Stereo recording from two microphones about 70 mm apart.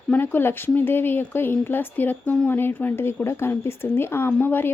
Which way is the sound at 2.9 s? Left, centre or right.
Left.